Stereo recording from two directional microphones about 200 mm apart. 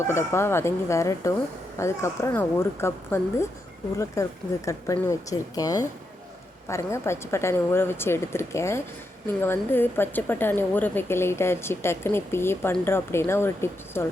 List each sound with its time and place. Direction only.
0.1 s a woman's voice: 15° left (ahead or behind)